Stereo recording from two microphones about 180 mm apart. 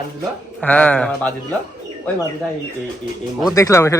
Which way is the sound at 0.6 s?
5° left (ahead or behind).